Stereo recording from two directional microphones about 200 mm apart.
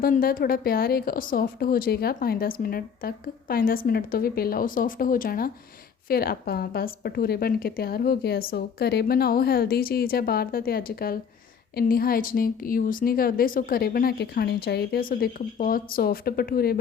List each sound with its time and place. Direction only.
0.0 s a woman's voice: 45° left (ahead or behind)